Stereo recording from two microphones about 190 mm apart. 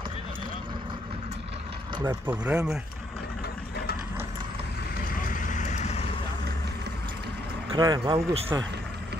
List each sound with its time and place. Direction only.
2.0 s speech: 10° right (ahead or behind)
5.5 s vehicle: 35° left (ahead or behind)
7.7 s speech: 20° right (ahead or behind)